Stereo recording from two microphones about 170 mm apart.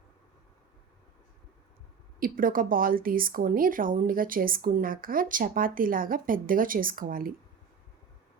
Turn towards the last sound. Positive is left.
turn(degrees=-55)  # may be behind; listen again after turning